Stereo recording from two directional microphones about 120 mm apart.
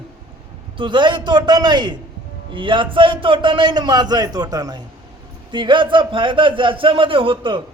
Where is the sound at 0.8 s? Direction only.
40° right (ahead or behind).